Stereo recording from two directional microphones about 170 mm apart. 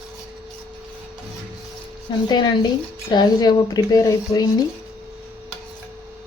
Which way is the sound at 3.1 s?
25° left (ahead or behind).